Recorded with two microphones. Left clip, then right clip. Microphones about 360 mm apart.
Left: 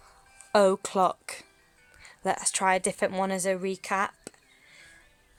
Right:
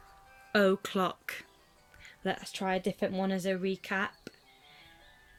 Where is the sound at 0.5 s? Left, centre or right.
Centre.